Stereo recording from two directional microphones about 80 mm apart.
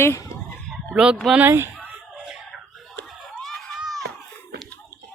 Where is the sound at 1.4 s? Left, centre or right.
Right.